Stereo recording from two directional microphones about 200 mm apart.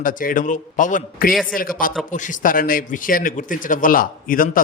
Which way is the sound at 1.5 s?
45° left (ahead or behind).